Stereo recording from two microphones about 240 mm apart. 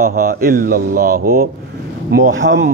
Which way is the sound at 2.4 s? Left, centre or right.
Right.